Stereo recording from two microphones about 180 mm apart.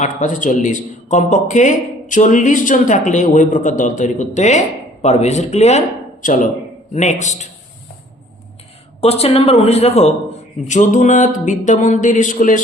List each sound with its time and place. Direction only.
0.0 s a man's voice: 45° left (ahead or behind)
9.0 s a man's voice: 35° left (ahead or behind)